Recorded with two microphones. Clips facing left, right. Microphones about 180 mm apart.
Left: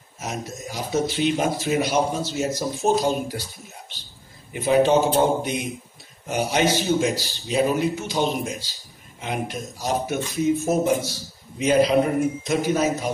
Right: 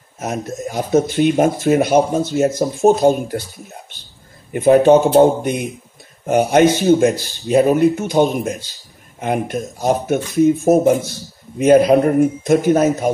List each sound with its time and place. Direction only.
0.2 s speech: 55° right (ahead or behind)
4.5 s speech: 55° right (ahead or behind)